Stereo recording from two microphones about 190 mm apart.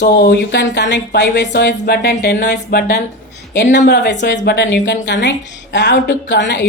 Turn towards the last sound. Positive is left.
turn(degrees=65)  # may be behind; listen again after turning